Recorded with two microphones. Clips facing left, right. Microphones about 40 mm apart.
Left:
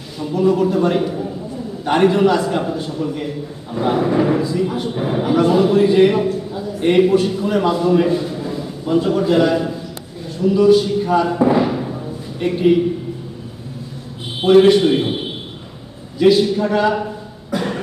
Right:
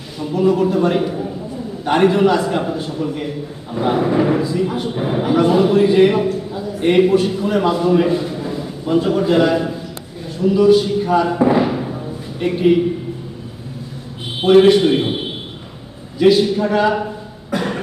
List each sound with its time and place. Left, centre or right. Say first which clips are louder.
0.2 s a man's voice: even; centre
8.1 s a sound: even; centre
9.0 s a man's voice: even; centre
14.4 s a man's voice: even; centre
16.1 s a man's voice: even; centre